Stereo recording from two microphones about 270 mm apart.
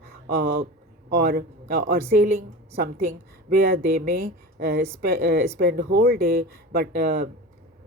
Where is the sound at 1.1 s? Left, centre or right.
Right.